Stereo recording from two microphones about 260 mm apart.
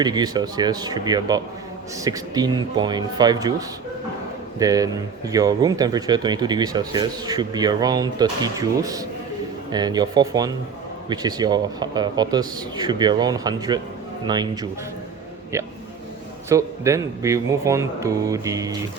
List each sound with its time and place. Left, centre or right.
0.0 s speech: centre
4.6 s speech: centre